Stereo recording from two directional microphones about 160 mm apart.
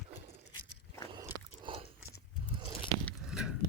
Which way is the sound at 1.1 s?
30° right (ahead or behind).